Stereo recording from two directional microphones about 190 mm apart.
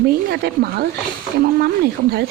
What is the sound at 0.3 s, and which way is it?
Speech, 55° right (ahead or behind).